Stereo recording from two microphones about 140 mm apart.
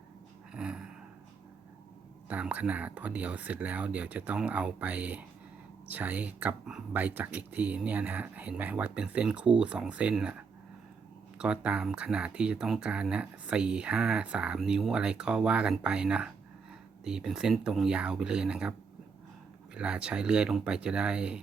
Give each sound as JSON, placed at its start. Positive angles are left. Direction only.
{"t": 0.5, "sound": "a sound", "side_deg": -5}
{"t": 2.3, "sound": "speech", "side_deg": -10}
{"t": 19.7, "sound": "speech", "side_deg": -5}